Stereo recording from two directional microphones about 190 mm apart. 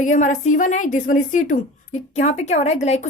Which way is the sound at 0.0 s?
40° left (ahead or behind).